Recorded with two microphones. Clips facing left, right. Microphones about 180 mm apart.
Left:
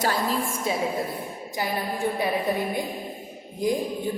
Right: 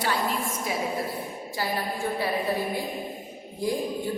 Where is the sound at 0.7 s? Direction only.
25° left (ahead or behind).